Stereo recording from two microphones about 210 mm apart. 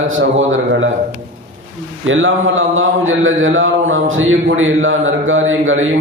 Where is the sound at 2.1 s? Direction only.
70° right (ahead or behind).